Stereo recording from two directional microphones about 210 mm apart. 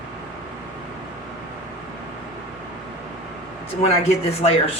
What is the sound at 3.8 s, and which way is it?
Speech, 30° left (ahead or behind).